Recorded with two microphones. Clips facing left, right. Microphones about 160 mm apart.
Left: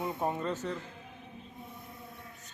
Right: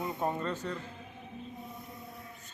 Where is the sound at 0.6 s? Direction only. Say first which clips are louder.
Left 1 dB; 15° left (ahead or behind).